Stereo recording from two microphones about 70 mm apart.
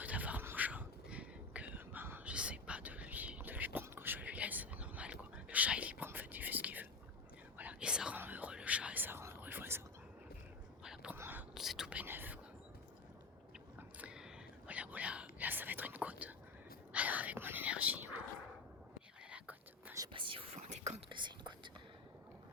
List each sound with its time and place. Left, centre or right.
0.0 s a sound: right
0.5 s whispering: right
2.2 s whispering: centre
8.1 s whispering: right
11.1 s whispering: right
11.5 s whispering: centre
11.9 s whispering: right
14.7 s whispering: right
20.0 s whispering: right
21.2 s whispering: right